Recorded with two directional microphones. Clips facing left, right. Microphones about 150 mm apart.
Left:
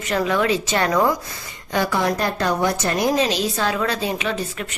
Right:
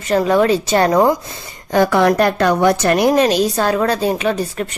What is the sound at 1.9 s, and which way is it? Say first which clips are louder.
A woman's voice: right 8 dB; 65° right (ahead or behind).